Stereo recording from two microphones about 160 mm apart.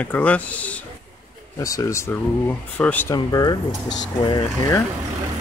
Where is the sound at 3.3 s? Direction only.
25° left (ahead or behind).